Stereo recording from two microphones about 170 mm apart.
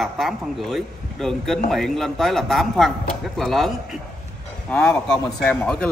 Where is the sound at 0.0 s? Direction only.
Centre (ahead or behind).